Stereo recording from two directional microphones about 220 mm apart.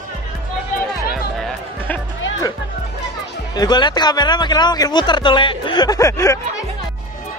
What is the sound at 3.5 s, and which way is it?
A man's voice, 20° left (ahead or behind).